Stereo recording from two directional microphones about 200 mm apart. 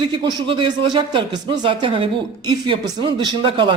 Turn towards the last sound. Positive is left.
turn(degrees=-25)  # may be behind; listen again after turning